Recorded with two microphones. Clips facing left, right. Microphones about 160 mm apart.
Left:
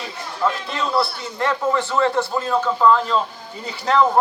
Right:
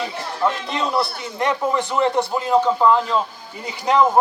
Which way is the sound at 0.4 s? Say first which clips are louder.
Right 1 dB; 20° right (ahead or behind).